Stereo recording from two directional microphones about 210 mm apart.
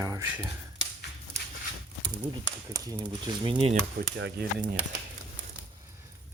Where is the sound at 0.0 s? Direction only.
15° right (ahead or behind).